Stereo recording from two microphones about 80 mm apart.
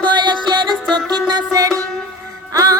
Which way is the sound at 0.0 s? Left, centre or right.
Right.